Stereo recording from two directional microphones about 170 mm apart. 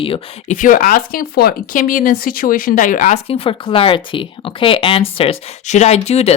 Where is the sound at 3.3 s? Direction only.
35° left (ahead or behind).